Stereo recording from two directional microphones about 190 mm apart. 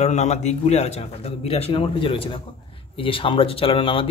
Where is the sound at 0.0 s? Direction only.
35° left (ahead or behind).